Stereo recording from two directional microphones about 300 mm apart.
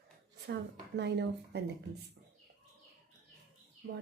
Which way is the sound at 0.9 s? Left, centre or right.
Right.